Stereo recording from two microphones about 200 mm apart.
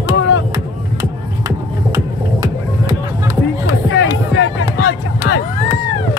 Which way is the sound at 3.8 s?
70° left (ahead or behind).